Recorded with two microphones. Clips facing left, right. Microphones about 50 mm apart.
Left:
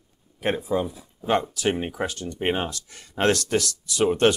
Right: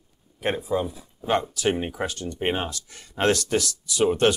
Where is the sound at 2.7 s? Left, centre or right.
Left.